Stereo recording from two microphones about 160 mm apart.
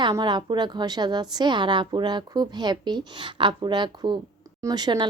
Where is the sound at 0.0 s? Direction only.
25° right (ahead or behind).